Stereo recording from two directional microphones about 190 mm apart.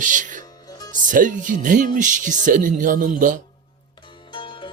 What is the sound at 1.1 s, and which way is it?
Speech, 45° right (ahead or behind).